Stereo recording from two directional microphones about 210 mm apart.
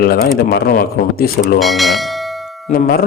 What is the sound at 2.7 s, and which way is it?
Speech, 45° left (ahead or behind).